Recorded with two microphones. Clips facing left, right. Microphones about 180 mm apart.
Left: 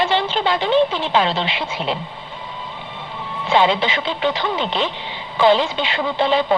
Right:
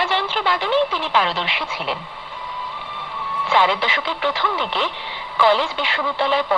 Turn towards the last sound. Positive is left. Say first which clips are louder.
# left 3 dB
turn(degrees=20)  # may be behind; listen again after turning